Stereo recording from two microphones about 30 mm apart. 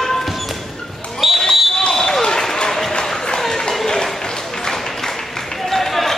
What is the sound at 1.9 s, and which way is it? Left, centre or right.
Basketball bounce, centre.